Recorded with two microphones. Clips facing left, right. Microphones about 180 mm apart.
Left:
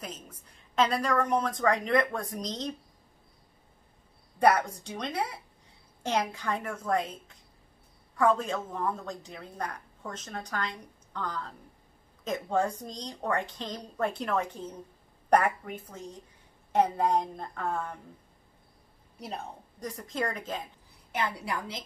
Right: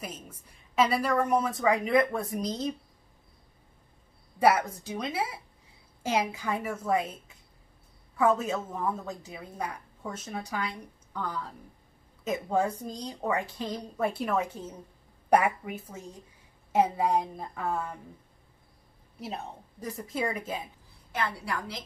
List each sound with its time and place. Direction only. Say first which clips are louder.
0.0 s a woman's voice: right 1 dB; 10° right (ahead or behind)
4.4 s a woman's voice: even; 5° right (ahead or behind)
19.1 s a woman's voice: right 1 dB; 5° right (ahead or behind)
21.1 s a woman's voice: even; 20° left (ahead or behind)